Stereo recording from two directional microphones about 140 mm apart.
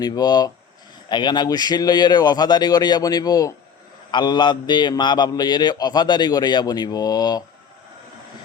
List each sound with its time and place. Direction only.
0.0 s a man's voice: 30° left (ahead or behind)